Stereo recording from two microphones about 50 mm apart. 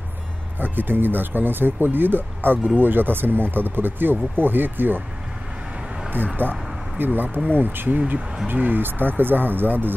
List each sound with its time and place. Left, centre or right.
0.6 s speech: right
6.0 s speech: right